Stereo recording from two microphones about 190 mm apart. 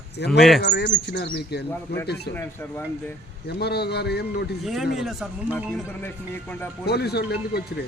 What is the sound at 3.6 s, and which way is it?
Speech, 60° left (ahead or behind).